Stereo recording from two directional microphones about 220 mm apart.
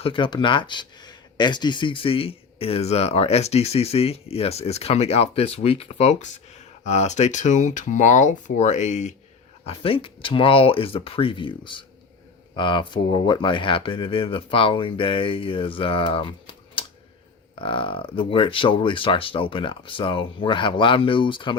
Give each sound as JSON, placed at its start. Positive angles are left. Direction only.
{"t": 0.0, "sound": "speech", "side_deg": 25}